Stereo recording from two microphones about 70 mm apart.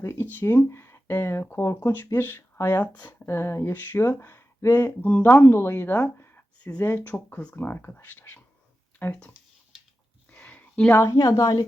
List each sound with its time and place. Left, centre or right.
0.0 s speech: left
3.2 s speech: left
10.3 s a sound: left
10.9 s a woman's voice: left
11.3 s a woman's voice: left